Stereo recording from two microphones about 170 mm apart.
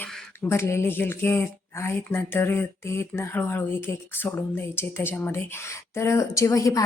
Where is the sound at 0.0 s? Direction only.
15° left (ahead or behind).